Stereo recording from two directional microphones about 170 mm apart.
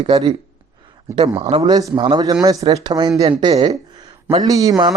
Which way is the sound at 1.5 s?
25° right (ahead or behind).